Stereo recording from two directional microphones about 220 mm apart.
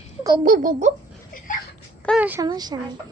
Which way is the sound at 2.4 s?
20° right (ahead or behind).